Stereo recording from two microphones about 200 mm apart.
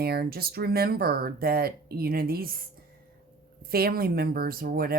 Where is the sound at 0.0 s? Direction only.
50° right (ahead or behind).